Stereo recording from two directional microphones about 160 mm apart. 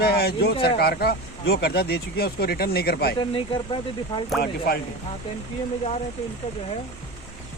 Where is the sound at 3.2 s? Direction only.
35° left (ahead or behind).